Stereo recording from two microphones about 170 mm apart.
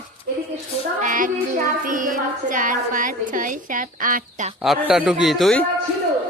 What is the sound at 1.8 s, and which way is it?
A woman's voice, 50° right (ahead or behind).